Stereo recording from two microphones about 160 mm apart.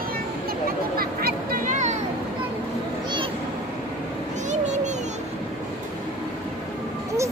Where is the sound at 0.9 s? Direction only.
65° right (ahead or behind); by 2.0 s 50° right (ahead or behind).